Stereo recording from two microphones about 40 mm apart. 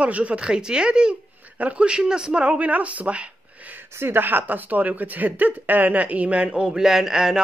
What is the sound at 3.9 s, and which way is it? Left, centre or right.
A woman's voice, right.